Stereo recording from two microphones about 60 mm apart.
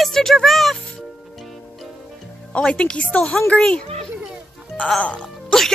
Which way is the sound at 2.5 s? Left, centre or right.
Centre.